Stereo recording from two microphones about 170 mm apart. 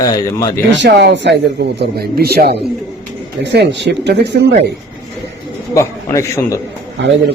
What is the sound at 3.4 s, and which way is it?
Speech, 90° right.